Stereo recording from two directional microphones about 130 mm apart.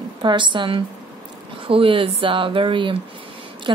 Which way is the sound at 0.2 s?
35° right (ahead or behind).